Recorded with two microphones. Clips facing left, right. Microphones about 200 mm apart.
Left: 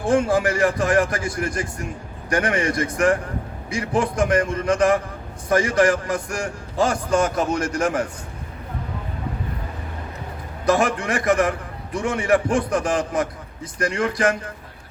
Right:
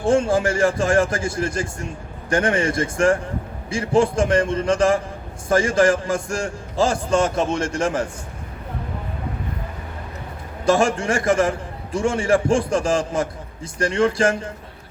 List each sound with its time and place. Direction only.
0.0 s a man's voice: 25° right (ahead or behind)
10.7 s a man's voice: 25° right (ahead or behind)